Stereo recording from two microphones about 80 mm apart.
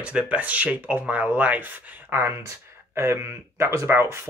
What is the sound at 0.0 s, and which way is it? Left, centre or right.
Speech, centre.